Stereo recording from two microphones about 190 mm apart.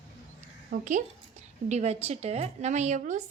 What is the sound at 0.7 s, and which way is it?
A woman's voice, 40° right (ahead or behind).